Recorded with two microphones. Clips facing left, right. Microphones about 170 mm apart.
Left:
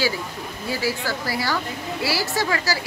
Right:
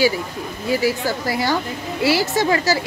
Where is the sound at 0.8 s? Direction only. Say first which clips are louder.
Right 5 dB; 20° right (ahead or behind).